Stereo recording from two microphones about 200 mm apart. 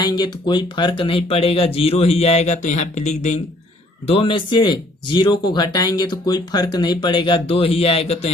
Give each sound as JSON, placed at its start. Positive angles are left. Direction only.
{"t": 0.0, "sound": "speech", "side_deg": 20}